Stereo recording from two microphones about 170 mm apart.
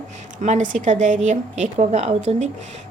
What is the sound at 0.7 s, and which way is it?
A woman's voice, 45° right (ahead or behind).